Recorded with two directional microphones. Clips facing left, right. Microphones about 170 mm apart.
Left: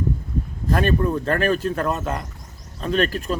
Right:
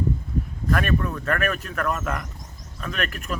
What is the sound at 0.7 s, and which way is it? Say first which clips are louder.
Speech: left 4 dB; 30° left (ahead or behind).